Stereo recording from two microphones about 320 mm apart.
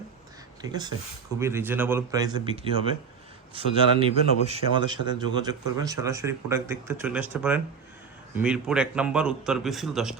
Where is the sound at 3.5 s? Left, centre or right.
Centre.